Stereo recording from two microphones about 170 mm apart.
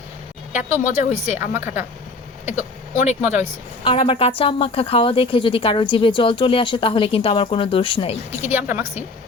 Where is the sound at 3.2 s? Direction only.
15° right (ahead or behind).